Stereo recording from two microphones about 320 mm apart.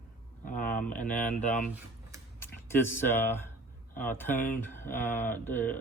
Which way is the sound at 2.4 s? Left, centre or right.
Centre.